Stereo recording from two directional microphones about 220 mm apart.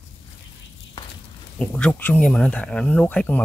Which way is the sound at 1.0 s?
20° left (ahead or behind).